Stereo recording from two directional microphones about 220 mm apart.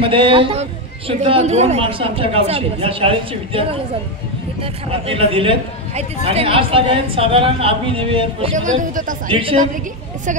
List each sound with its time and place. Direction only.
0.0 s a man's voice: 25° right (ahead or behind)
9.3 s a man's voice: 25° right (ahead or behind)